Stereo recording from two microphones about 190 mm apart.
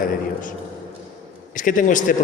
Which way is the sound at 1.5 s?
45° left (ahead or behind).